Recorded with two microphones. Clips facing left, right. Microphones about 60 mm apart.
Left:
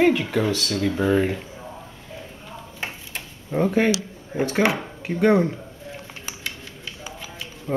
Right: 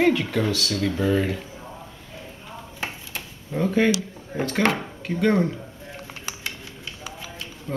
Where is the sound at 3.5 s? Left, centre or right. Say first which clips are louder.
Left 1 dB; centre.